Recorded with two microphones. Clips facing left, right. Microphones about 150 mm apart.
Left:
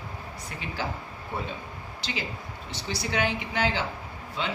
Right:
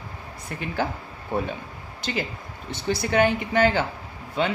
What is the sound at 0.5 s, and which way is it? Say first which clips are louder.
Speech: right 8 dB; 50° right (ahead or behind).